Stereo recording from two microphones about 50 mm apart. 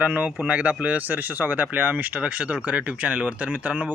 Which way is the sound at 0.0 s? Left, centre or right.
Right.